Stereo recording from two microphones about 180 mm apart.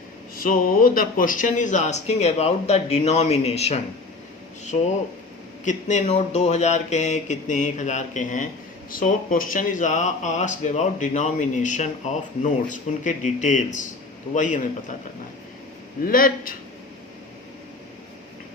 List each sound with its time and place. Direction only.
0.3 s speech: 50° left (ahead or behind); by 3.8 s 35° left (ahead or behind)
5.6 s speech: 40° left (ahead or behind)
16.0 s speech: 50° left (ahead or behind)